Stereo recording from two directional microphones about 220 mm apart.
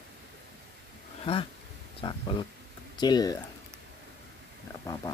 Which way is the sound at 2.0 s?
25° left (ahead or behind).